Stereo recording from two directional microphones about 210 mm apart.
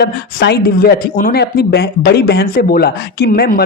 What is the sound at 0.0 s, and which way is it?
Speech, 50° left (ahead or behind).